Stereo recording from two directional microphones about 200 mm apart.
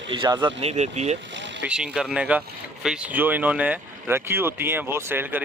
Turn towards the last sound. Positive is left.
turn(degrees=-10)  # may be behind; listen again after turning